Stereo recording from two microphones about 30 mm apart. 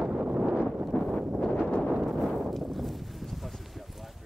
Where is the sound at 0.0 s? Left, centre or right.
Right.